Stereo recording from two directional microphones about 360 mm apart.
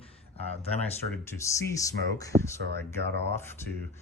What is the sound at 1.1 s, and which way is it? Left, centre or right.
Speech, centre.